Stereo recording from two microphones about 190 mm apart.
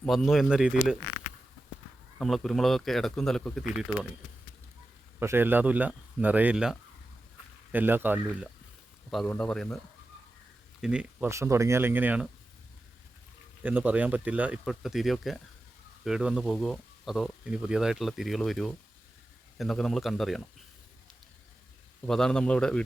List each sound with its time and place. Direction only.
0.0 s speech: centre (ahead or behind)
2.1 s speech: centre (ahead or behind)
5.2 s speech: 10° right (ahead or behind)
9.0 s speech: 5° left (ahead or behind)
13.6 s speech: 10° right (ahead or behind)
22.0 s speech: 5° left (ahead or behind)